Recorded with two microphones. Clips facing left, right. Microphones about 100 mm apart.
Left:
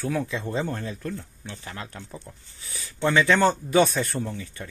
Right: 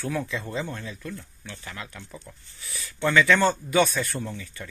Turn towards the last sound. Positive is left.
turn(degrees=25)  # may be behind; listen again after turning